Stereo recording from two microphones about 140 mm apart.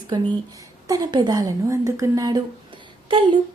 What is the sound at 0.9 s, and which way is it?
A woman's voice, 30° right (ahead or behind).